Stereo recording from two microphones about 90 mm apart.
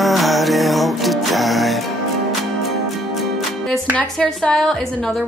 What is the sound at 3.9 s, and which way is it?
A woman's voice, 10° left (ahead or behind).